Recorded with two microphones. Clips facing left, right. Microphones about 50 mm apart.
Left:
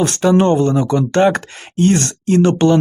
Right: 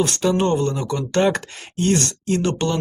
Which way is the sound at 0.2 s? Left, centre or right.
Left.